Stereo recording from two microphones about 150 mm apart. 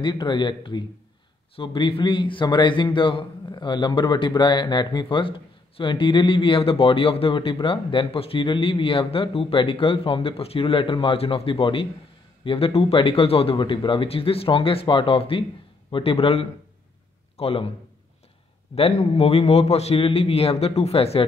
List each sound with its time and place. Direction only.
0.0 s a man's voice: 30° left (ahead or behind)
18.8 s a man's voice: 40° left (ahead or behind)